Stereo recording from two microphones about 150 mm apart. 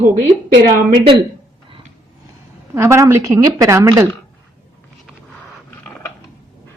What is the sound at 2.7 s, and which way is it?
A woman's voice, 20° right (ahead or behind).